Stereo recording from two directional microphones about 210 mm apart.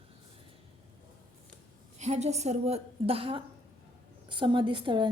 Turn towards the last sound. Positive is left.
turn(degrees=-25)  # may be behind; listen again after turning